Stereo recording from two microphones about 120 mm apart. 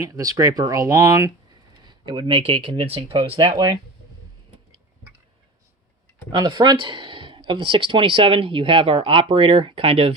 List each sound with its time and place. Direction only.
0.0 s speech: 30° right (ahead or behind)
1.8 s speech: 40° right (ahead or behind)
6.3 s speech: 40° right (ahead or behind)